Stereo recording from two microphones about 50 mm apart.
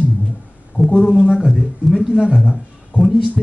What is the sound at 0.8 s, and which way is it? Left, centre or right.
Speech, right.